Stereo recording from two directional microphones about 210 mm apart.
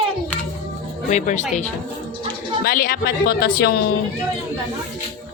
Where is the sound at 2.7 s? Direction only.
45° left (ahead or behind).